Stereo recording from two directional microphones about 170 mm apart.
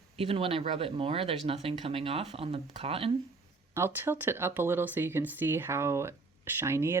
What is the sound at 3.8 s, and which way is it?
Speech, 15° right (ahead or behind).